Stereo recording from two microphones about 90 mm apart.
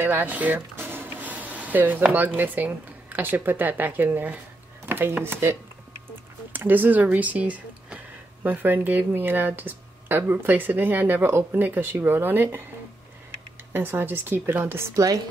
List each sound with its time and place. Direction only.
0.0 s speech: 20° right (ahead or behind)
13.7 s speech: 25° right (ahead or behind)